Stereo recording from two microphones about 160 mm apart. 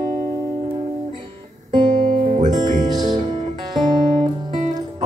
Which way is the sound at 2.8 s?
25° right (ahead or behind).